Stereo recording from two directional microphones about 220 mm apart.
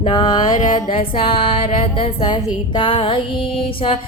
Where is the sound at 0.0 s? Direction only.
20° left (ahead or behind).